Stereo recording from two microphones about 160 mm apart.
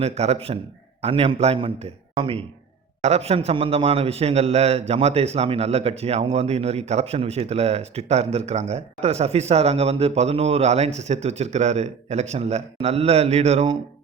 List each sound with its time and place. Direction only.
0.0 s a man's voice: 40° right (ahead or behind)